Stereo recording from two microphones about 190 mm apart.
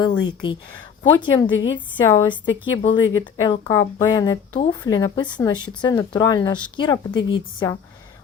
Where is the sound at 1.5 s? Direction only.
80° left.